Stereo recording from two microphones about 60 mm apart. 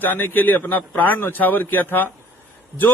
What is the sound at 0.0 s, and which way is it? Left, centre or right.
A man's voice, left.